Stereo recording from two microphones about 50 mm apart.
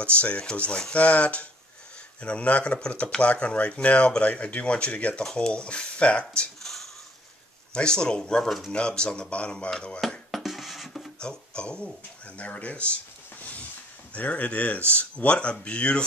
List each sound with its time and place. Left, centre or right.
0.0 s speech: left
6.6 s a sound: centre
7.7 s speech: centre
8.5 s speech: centre
8.7 s speech: centre
10.0 s music: centre
11.1 s speech: centre
12.4 s a sound: left
14.1 s speech: left